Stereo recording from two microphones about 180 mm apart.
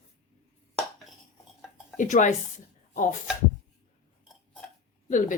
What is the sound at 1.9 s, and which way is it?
Speech, 45° left (ahead or behind).